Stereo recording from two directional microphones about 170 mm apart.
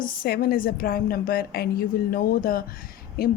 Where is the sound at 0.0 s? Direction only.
60° left (ahead or behind).